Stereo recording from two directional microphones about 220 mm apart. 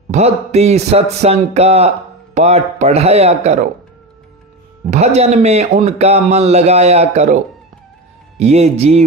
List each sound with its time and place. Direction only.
0.1 s a man's voice: 30° right (ahead or behind)
4.9 s a man's voice: 30° right (ahead or behind)
8.4 s a man's voice: 30° right (ahead or behind)